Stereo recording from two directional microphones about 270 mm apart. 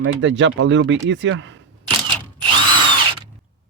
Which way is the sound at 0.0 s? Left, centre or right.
Right.